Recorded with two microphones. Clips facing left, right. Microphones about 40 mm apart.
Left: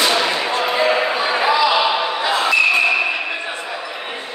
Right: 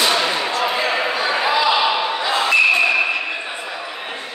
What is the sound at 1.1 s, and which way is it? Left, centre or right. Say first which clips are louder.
Basketball bounce: left 2 dB; centre.